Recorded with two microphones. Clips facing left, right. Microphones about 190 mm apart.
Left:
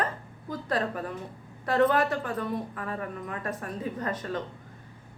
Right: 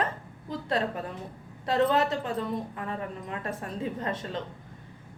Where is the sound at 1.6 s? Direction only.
25° right (ahead or behind).